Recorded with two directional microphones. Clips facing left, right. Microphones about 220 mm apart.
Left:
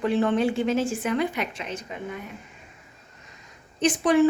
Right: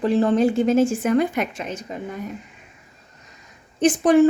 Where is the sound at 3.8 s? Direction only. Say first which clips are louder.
Right 5 dB; 45° right (ahead or behind).